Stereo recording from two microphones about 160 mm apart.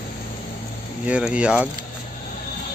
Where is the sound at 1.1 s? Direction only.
5° right (ahead or behind).